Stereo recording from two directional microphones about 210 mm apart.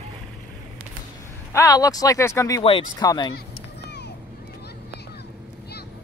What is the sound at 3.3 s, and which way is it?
Run, 50° left (ahead or behind).